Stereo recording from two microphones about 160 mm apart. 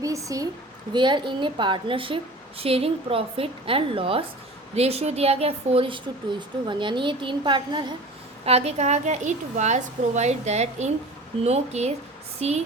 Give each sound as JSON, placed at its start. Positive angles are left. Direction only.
{"t": 0.0, "sound": "a woman's voice", "side_deg": -20}
{"t": 8.4, "sound": "a woman's voice", "side_deg": -40}